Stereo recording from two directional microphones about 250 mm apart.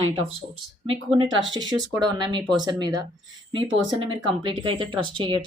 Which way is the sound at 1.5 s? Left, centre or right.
Centre.